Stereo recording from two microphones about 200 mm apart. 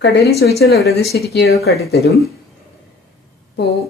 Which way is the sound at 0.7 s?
Centre (ahead or behind).